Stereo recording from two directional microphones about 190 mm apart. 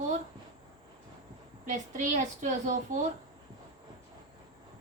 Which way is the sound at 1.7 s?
40° right (ahead or behind).